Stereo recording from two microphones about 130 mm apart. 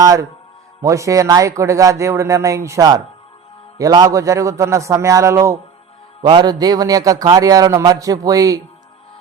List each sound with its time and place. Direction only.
0.0 s a man's voice: 30° right (ahead or behind)
6.2 s a man's voice: 35° right (ahead or behind)